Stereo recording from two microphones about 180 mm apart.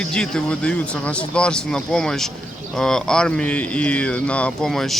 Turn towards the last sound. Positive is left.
turn(degrees=0)  # may be behind; listen again after turning